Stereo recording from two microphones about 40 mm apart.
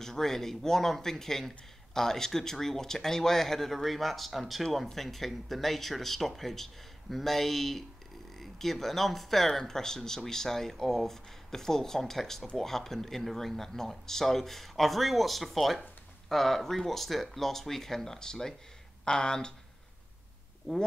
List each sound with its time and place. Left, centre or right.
0.0 s speech: centre
20.7 s speech: centre